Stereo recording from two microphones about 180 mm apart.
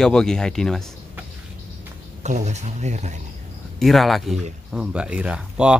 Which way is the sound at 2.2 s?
40° right (ahead or behind).